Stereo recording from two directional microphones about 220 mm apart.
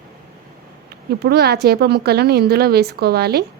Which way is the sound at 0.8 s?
45° right (ahead or behind).